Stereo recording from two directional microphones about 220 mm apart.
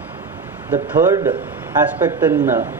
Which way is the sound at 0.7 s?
15° right (ahead or behind).